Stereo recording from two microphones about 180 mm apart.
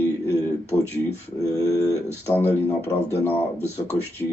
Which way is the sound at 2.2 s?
10° left (ahead or behind).